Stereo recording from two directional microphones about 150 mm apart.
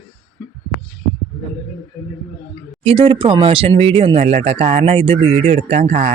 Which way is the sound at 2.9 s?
35° right (ahead or behind).